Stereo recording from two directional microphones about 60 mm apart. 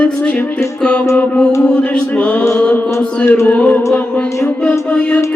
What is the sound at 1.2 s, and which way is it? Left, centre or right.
Mantra, centre.